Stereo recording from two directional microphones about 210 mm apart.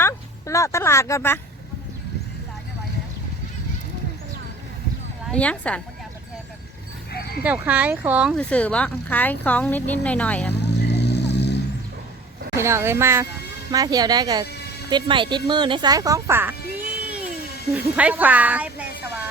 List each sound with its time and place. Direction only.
0.0 s a sound: 15° left (ahead or behind)
5.3 s speech: 5° left (ahead or behind)
7.4 s speech: 5° right (ahead or behind)
8.4 s speech: 5° left (ahead or behind)
10.7 s vehicle: 55° left (ahead or behind)
12.5 s speech: 15° right (ahead or behind)